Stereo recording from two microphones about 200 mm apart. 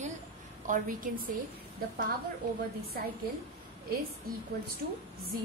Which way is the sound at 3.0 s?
45° right (ahead or behind).